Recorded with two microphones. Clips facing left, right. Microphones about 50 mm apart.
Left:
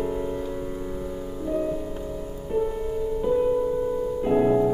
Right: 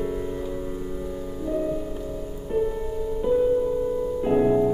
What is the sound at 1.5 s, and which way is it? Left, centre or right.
Music, centre.